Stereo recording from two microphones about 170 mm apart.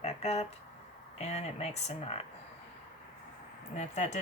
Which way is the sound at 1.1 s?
40° left (ahead or behind).